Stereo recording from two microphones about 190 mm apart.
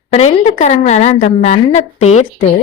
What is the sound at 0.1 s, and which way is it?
A woman's voice, 35° left (ahead or behind).